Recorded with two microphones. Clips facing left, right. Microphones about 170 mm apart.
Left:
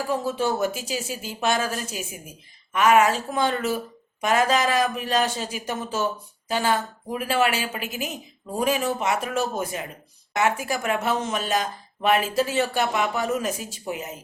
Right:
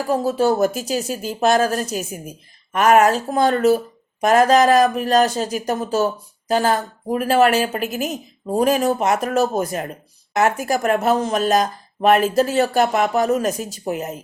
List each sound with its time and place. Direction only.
0.1 s speech: 40° right (ahead or behind)